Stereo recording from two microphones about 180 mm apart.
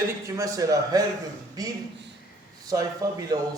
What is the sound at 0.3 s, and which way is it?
Speech, 20° right (ahead or behind).